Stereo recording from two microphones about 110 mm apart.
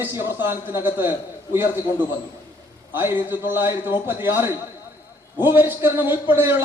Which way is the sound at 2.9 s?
20° right (ahead or behind).